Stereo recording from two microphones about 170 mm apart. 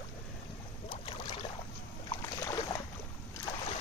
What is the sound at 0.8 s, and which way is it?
Boat, 30° left (ahead or behind).